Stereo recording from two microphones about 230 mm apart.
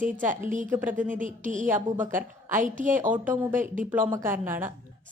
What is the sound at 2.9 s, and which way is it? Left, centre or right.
A woman's voice, centre.